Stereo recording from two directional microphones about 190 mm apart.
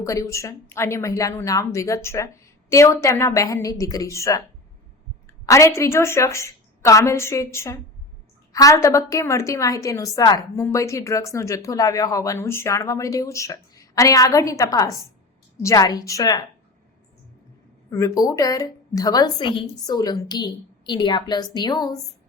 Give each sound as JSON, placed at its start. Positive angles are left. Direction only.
{"t": 0.0, "sound": "a woman's voice", "side_deg": 15}
{"t": 17.9, "sound": "a woman's voice", "side_deg": 15}